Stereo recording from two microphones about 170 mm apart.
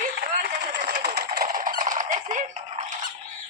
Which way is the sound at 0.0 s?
55° right (ahead or behind).